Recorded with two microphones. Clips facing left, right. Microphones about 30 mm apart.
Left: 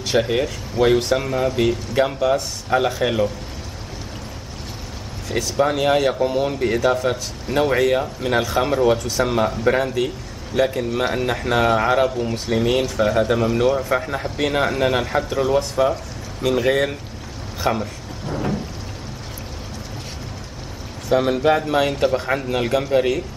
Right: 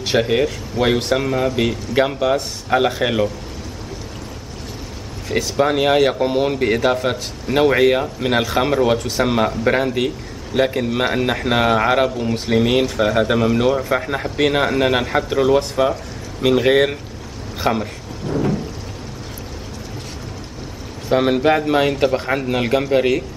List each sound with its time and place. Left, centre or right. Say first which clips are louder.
0.0 s speech: right 2 dB; centre
5.3 s speech: right 2 dB; centre
16.5 s speech: right 4 dB; right
18.2 s thunder: right 4 dB; centre
21.1 s speech: right 2 dB; centre